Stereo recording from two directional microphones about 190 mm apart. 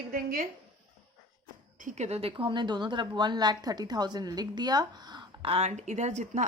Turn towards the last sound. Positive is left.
turn(degrees=-35)  # may be behind; listen again after turning